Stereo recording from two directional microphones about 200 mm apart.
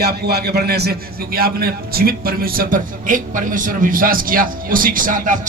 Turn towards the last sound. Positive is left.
turn(degrees=-40)  # may be behind; listen again after turning